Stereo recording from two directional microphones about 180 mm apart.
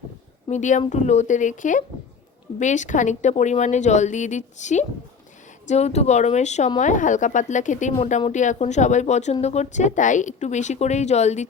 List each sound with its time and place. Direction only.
0.4 s speech: 40° left (ahead or behind)